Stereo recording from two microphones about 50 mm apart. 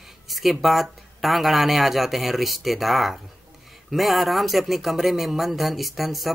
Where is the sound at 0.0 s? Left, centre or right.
Centre.